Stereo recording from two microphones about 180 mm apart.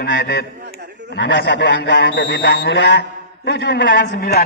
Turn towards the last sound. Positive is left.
turn(degrees=60)  # may be behind; listen again after turning